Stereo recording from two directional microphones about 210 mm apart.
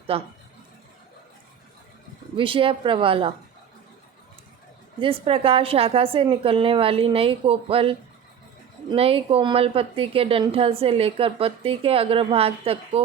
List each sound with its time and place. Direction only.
0.1 s a woman's voice: 25° right (ahead or behind)
2.3 s a woman's voice: 25° right (ahead or behind)
4.9 s a woman's voice: 25° right (ahead or behind)